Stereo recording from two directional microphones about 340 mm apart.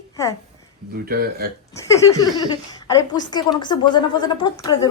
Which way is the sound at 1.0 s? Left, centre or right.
Right.